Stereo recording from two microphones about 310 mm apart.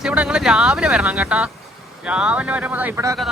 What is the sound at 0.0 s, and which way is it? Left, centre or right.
Speech, centre.